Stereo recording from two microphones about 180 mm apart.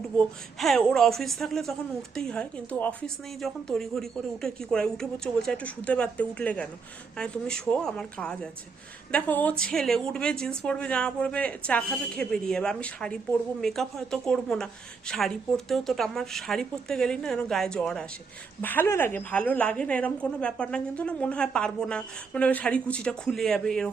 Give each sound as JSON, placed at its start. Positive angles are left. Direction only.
{"t": 0.6, "sound": "a woman's voice", "side_deg": 0}